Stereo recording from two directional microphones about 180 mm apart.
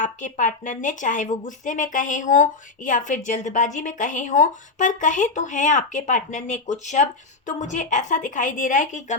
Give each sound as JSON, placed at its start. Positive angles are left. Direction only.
{"t": 0.0, "sound": "speech", "side_deg": 45}